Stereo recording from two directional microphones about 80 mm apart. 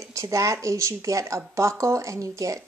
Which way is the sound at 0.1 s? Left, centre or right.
Right.